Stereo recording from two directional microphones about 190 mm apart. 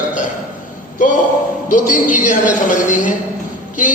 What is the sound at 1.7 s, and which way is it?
A man's voice, 45° left (ahead or behind).